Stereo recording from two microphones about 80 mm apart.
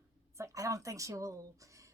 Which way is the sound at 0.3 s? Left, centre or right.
Right.